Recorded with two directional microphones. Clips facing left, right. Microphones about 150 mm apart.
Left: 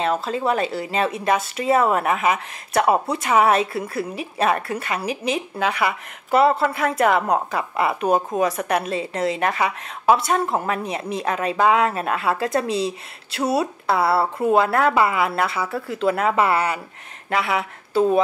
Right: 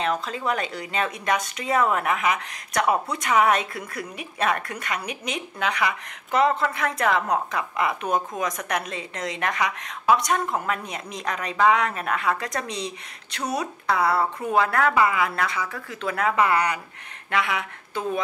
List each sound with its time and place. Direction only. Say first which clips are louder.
0.0 s a woman's voice: left 4 dB; 30° left (ahead or behind)